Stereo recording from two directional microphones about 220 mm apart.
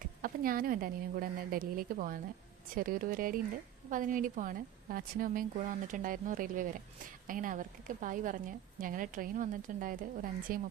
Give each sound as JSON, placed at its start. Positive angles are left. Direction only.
{"t": 0.0, "sound": "a woman's voice", "side_deg": -40}